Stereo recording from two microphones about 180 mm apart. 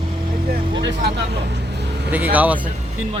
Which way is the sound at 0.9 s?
75° right (ahead or behind).